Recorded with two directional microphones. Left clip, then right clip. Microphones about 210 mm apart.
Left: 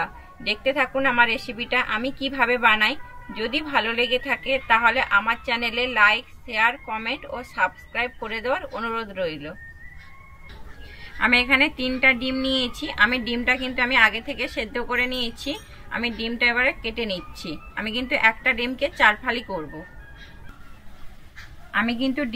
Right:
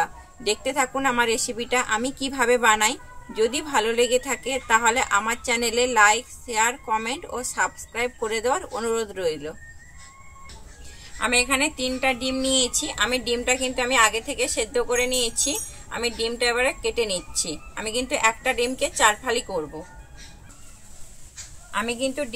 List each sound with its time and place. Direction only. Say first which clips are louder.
0.0 s a woman's voice: right 2 dB; 25° right (ahead or behind)
11.6 s speech: left 4 dB; 30° right (ahead or behind)